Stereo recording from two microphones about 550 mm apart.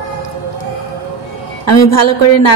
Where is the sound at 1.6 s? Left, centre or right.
Left.